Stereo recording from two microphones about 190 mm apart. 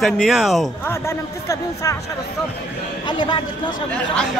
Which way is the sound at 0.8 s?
15° left (ahead or behind).